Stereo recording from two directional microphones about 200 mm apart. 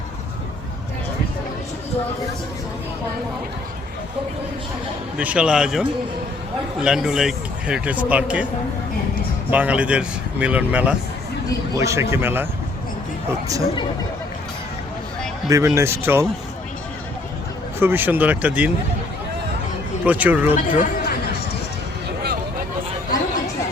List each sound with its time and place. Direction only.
5.1 s speech: 5° right (ahead or behind)
9.5 s speech: 5° right (ahead or behind)
15.4 s speech: 15° right (ahead or behind)
17.7 s speech: 10° right (ahead or behind)
20.1 s speech: 5° right (ahead or behind)
20.7 s a sound: 45° left (ahead or behind)